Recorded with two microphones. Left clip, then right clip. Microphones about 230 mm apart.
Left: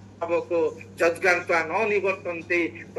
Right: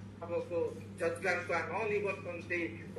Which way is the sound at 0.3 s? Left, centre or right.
Left.